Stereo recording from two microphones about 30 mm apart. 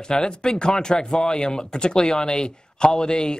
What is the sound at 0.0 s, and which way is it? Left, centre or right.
Speech, left.